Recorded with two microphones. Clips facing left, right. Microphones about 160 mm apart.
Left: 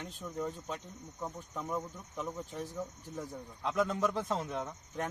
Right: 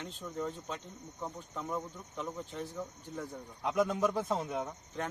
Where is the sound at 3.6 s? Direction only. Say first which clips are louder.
Right 1 dB; 15° right (ahead or behind).